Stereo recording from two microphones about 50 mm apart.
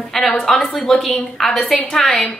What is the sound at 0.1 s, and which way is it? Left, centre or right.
A woman's voice, centre.